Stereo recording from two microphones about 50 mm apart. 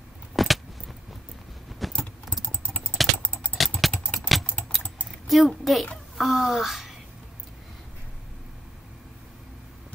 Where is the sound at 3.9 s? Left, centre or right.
Left.